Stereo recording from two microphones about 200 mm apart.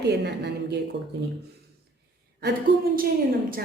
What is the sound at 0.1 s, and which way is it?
Speech, 60° right (ahead or behind).